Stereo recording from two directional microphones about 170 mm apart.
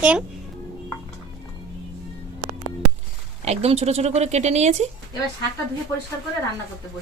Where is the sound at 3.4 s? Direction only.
40° right (ahead or behind).